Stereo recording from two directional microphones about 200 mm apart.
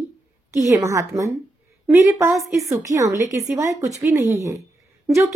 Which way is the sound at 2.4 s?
Centre (ahead or behind).